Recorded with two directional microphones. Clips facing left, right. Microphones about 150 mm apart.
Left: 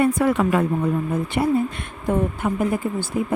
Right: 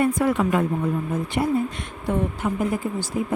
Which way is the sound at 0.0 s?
65° left (ahead or behind).